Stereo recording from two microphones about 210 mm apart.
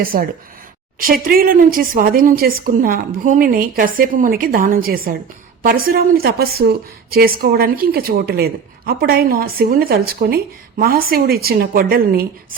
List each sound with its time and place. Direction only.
0.0 s a woman's voice: 45° right (ahead or behind)